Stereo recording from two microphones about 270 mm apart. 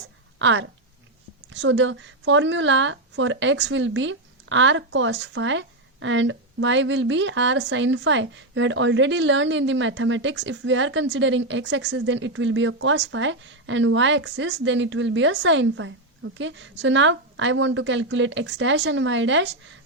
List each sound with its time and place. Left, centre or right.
0.3 s speech: right